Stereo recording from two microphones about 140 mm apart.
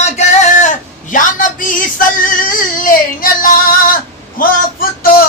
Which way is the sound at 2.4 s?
90° left.